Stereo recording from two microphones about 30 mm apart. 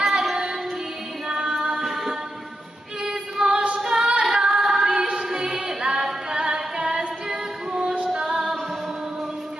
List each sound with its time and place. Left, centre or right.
0.0 s female singing: centre
1.8 s music: centre
3.0 s music: right
3.8 s female singing: centre
5.3 s music: centre